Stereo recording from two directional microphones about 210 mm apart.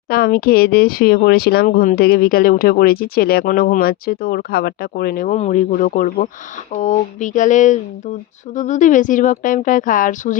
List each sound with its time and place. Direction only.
0.1 s speech: 45° left (ahead or behind)